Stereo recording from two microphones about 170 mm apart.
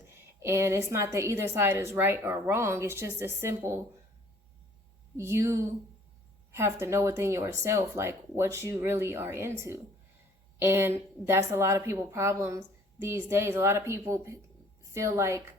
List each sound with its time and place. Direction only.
0.1 s a woman's voice: 15° right (ahead or behind)
5.1 s a woman's voice: 15° right (ahead or behind)